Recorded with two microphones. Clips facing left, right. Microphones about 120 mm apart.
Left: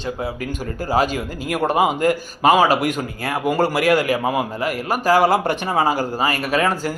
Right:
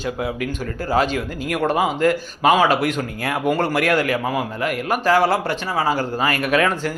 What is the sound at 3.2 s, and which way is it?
A man's voice, 5° left (ahead or behind).